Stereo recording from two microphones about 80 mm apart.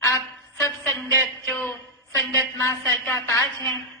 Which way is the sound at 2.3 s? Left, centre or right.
Left.